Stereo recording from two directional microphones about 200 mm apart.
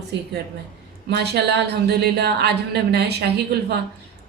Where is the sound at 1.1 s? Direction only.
55° right (ahead or behind).